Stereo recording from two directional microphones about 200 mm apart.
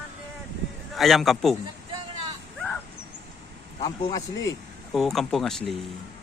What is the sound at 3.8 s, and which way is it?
Speech, 20° left (ahead or behind).